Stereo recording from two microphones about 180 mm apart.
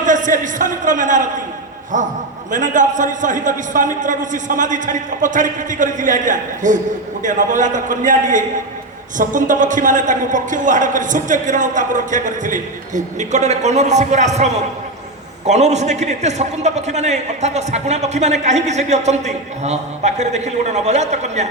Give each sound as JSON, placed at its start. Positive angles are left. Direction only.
{"t": 0.0, "sound": "a man's voice", "side_deg": -45}